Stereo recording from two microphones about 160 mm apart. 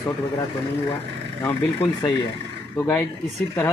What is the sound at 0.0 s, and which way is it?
A man's voice, 20° left (ahead or behind).